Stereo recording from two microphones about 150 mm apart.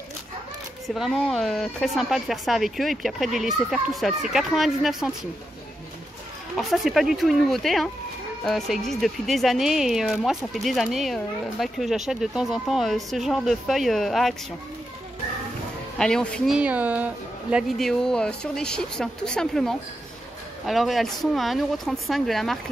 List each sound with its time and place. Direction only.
0.8 s a woman's voice: centre (ahead or behind)
6.5 s a woman's voice: centre (ahead or behind)
16.0 s a woman's voice: 5° left (ahead or behind)
16.5 s a woman's voice: 10° right (ahead or behind)